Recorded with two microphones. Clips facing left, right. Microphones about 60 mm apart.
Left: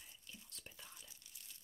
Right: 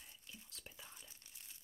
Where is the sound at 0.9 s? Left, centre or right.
Right.